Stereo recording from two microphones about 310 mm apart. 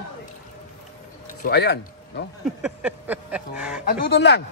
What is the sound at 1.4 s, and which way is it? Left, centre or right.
Speech, left.